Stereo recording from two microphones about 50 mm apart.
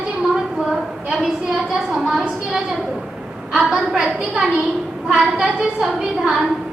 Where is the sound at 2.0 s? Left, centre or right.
Centre.